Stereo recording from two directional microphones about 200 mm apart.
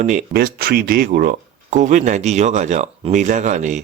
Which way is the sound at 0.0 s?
40° right (ahead or behind).